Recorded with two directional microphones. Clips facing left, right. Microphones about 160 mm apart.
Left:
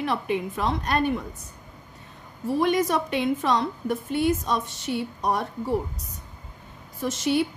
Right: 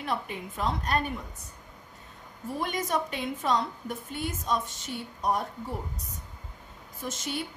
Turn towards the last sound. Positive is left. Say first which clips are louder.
# left 10 dB
turn(degrees=80)